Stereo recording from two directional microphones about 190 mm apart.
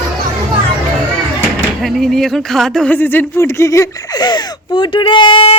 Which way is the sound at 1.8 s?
Centre (ahead or behind).